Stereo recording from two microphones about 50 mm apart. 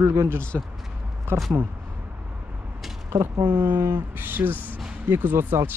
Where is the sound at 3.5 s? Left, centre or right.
Right.